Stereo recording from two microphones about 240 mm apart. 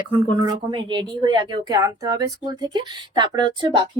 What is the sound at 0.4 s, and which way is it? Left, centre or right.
Speech, centre.